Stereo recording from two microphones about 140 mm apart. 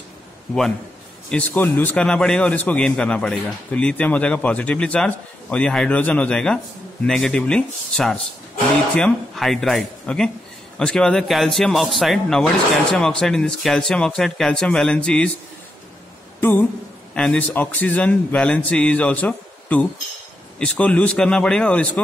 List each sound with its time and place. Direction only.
1.3 s a man's voice: 15° left (ahead or behind)
16.3 s a man's voice: 15° left (ahead or behind)